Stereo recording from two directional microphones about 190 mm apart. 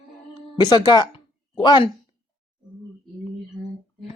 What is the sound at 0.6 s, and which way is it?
Speech, 25° left (ahead or behind).